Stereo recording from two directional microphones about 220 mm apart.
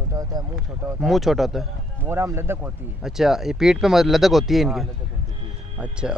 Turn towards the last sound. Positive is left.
turn(degrees=-5)  # may be behind; listen again after turning